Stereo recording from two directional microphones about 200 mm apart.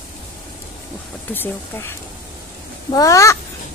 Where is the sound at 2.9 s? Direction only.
15° left (ahead or behind).